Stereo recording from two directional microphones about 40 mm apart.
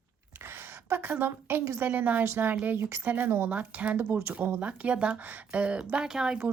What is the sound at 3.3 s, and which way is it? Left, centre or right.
Speech, right.